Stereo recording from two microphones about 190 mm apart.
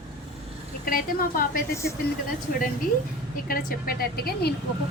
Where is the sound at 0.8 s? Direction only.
50° left (ahead or behind).